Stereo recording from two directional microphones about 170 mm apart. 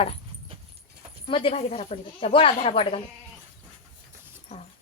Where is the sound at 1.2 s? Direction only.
30° left (ahead or behind).